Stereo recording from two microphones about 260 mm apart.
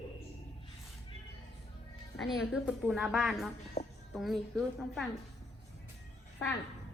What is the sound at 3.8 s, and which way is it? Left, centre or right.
Music, left.